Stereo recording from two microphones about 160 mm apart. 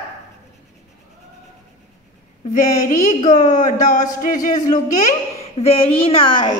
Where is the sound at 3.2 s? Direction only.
50° left (ahead or behind).